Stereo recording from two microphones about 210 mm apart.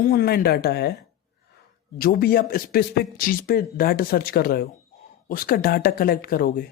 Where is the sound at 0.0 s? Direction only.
45° left (ahead or behind).